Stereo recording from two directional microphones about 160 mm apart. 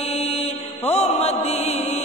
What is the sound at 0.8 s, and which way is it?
Mantra, 40° left (ahead or behind).